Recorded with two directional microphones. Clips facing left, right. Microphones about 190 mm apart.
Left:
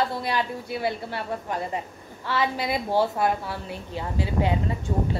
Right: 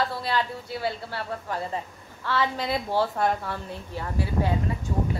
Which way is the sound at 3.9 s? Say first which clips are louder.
Left 1 dB; 20° left (ahead or behind).